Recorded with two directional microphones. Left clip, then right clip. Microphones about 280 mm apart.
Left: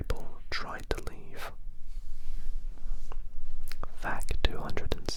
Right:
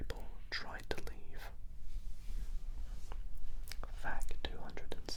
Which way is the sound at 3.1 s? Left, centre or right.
Centre.